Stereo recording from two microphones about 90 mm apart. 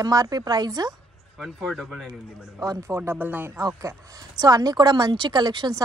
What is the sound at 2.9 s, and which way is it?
Speech, 30° right (ahead or behind).